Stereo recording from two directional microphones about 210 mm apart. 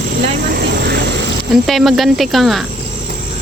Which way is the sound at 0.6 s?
50° right (ahead or behind).